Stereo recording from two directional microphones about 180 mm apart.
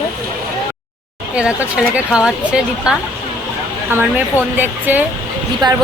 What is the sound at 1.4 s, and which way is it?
Speech, 5° right (ahead or behind).